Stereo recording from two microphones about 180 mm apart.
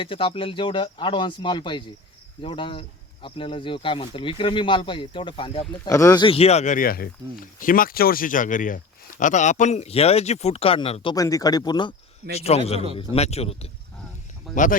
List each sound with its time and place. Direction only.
0.0 s speech: 30° left (ahead or behind)
11.1 s speech: 20° left (ahead or behind)
12.3 s speech: 35° left (ahead or behind)
14.5 s speech: 45° left (ahead or behind)